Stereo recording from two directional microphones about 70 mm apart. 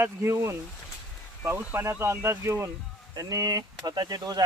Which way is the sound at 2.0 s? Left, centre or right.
Right.